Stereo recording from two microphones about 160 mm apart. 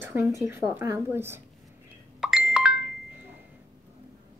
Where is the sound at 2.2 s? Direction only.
5° right (ahead or behind).